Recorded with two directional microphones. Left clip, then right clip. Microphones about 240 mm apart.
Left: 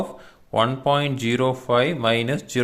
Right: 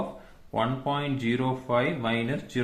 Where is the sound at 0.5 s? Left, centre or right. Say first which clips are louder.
Left 8 dB; left.